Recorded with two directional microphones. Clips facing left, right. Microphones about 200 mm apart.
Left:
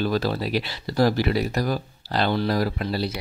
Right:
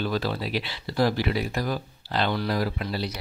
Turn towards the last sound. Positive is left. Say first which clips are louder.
# left 3 dB
turn(degrees=40)  # may be behind; listen again after turning